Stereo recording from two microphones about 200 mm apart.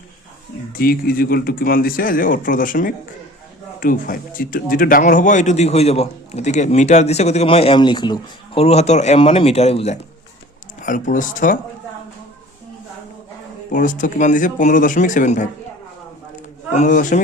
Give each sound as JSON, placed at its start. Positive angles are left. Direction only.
{"t": 0.7, "sound": "speech", "side_deg": 45}
{"t": 13.7, "sound": "speech", "side_deg": 40}
{"t": 16.3, "sound": "a sound", "side_deg": 40}